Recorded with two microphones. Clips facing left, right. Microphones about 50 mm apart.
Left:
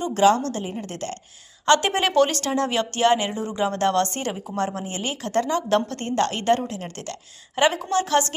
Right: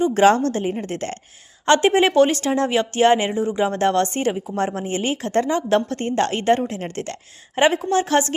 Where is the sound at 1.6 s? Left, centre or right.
Centre.